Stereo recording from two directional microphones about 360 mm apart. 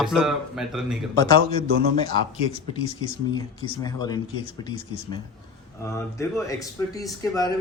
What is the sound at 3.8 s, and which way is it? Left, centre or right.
Speech, centre.